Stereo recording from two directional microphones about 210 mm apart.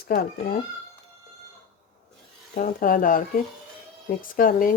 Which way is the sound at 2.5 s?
40° left (ahead or behind).